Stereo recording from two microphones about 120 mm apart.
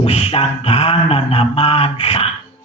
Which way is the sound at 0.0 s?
55° left (ahead or behind).